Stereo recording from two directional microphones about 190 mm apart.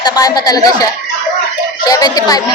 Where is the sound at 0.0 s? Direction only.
20° left (ahead or behind).